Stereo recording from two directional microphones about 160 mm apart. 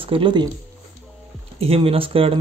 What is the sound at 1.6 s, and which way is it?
Speech, 35° right (ahead or behind).